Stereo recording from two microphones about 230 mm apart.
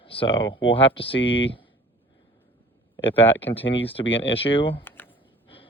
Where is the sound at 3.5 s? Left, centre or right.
Left.